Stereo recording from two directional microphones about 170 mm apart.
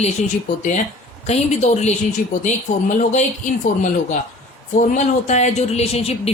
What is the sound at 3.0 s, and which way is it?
Speech, 45° left (ahead or behind).